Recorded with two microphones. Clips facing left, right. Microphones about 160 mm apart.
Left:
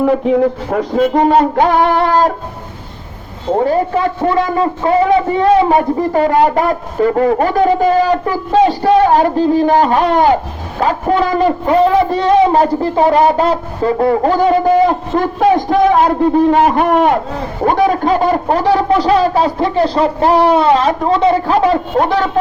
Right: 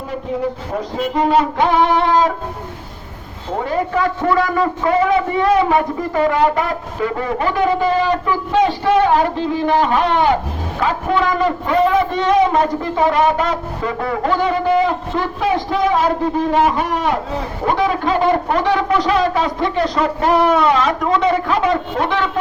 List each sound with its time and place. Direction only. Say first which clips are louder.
0.0 s a man's voice: left 10 dB; 75° left (ahead or behind)
1.7 s music: left 2 dB; 50° left (ahead or behind)
3.6 s a man's voice: left 4 dB; 30° left (ahead or behind); by 17.1 s 55° left (ahead or behind)
17.7 s a man's voice: left 5 dB; 45° left (ahead or behind)